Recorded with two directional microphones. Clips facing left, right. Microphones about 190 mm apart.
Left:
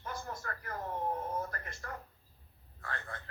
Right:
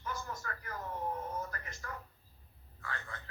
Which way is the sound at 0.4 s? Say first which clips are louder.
Left 1 dB; 50° left (ahead or behind).